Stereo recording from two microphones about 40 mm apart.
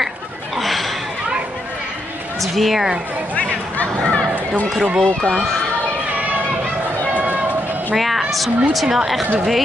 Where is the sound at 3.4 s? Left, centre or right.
Left.